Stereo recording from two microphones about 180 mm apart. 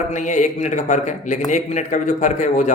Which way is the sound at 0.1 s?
45° left (ahead or behind).